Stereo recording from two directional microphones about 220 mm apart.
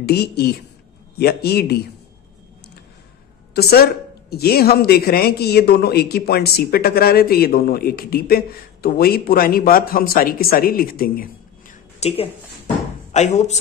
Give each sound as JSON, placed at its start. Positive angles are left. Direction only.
{"t": 0.0, "sound": "speech", "side_deg": 45}
{"t": 3.5, "sound": "speech", "side_deg": 45}
{"t": 12.0, "sound": "a woman's voice", "side_deg": 30}